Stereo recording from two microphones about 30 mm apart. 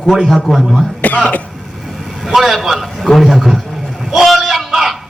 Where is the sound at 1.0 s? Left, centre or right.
Left.